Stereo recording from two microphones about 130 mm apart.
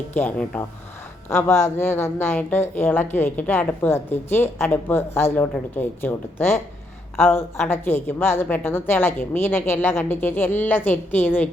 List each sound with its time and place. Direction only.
0.1 s a woman's voice: 15° left (ahead or behind)